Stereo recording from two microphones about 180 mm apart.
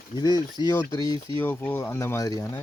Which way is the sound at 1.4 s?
10° left (ahead or behind).